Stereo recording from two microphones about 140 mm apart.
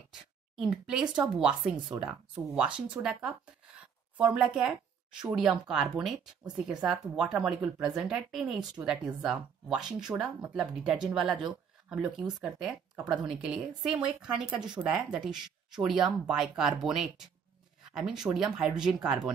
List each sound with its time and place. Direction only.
0.1 s a sound: 5° right (ahead or behind)
1.0 s speech: 30° right (ahead or behind)
1.4 s speech: 5° right (ahead or behind)